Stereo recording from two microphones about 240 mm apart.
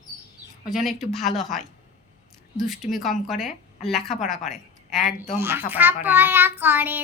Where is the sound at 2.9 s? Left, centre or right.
Centre.